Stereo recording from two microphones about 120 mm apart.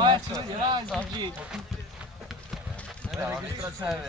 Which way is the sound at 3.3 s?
5° right (ahead or behind).